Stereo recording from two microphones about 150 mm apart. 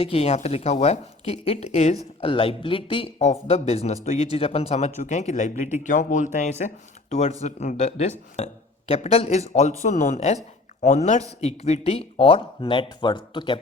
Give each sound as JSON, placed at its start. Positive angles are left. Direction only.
{"t": 0.0, "sound": "speech", "side_deg": 40}